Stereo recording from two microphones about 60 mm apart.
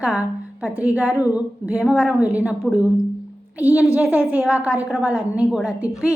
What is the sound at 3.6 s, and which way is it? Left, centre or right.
Speech, right.